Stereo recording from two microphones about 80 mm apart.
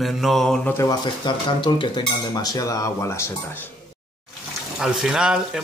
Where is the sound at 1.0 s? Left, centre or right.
Left.